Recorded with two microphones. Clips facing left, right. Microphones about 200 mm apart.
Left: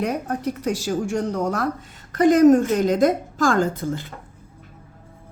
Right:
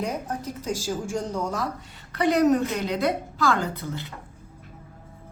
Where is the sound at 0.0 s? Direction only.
65° left (ahead or behind).